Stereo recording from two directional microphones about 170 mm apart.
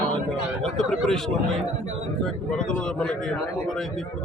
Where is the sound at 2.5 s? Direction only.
5° left (ahead or behind).